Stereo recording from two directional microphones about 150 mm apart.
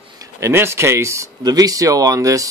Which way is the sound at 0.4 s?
15° right (ahead or behind).